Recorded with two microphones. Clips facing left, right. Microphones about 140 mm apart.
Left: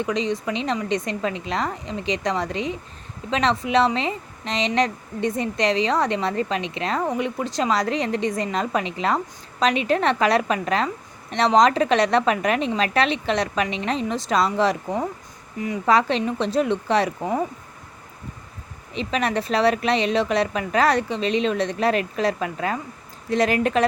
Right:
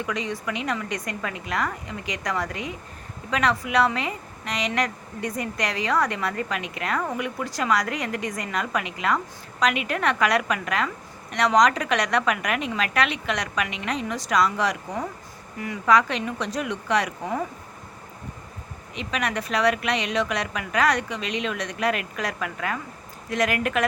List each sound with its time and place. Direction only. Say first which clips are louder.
0.0 s speech: left 5 dB; 25° left (ahead or behind)
18.9 s a woman's voice: left 5 dB; 30° left (ahead or behind)